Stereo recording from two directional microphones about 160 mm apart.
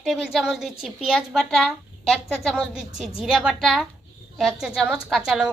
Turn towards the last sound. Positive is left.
turn(degrees=-5)  # may be behind; listen again after turning